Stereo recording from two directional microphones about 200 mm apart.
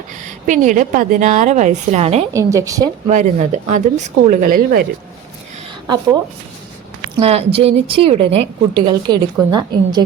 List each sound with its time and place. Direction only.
0.4 s a woman's voice: 40° right (ahead or behind)
2.3 s a woman's voice: 15° right (ahead or behind)
3.1 s a woman's voice: 40° right (ahead or behind)
7.2 s a woman's voice: 30° right (ahead or behind)